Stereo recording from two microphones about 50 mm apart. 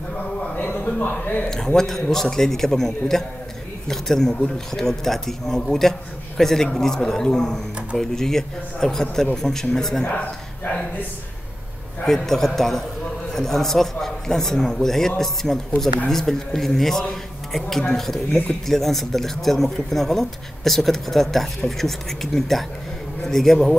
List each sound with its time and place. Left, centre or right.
0.7 s a sound: left
1.4 s speech: centre
12.1 s speech: centre